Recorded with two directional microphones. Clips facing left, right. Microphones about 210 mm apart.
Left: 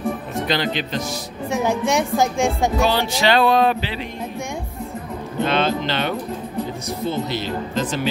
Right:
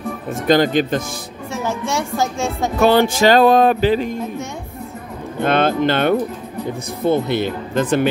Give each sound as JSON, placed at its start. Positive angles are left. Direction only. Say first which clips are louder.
{"t": 0.5, "sound": "music", "louder": "right 10 dB", "side_deg": -45}
{"t": 1.5, "sound": "music", "louder": "left 3 dB", "side_deg": 15}
{"t": 2.8, "sound": "music", "louder": "right 10 dB", "side_deg": -50}
{"t": 5.4, "sound": "music", "louder": "right 4 dB", "side_deg": -55}
{"t": 7.1, "sound": "speech", "louder": "right 8 dB", "side_deg": -55}